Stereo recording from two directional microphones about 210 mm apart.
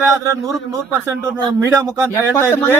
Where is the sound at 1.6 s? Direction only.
15° right (ahead or behind).